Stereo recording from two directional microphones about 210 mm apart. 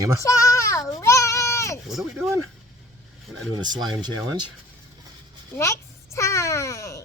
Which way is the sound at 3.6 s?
20° right (ahead or behind).